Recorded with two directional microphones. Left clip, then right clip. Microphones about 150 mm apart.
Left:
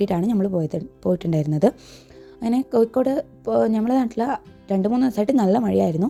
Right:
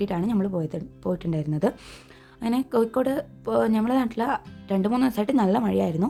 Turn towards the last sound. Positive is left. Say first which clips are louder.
# left 4 dB
turn(degrees=30)  # may be behind; listen again after turning